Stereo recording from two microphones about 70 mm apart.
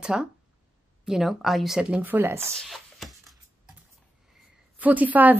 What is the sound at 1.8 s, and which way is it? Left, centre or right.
Speech, right.